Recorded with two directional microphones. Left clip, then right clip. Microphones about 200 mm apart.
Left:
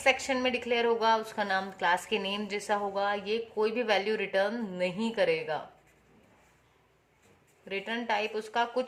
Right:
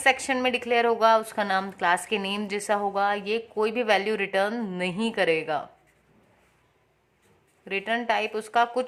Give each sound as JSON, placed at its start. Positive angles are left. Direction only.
{"t": 0.0, "sound": "a woman's voice", "side_deg": -40}
{"t": 7.6, "sound": "a woman's voice", "side_deg": -40}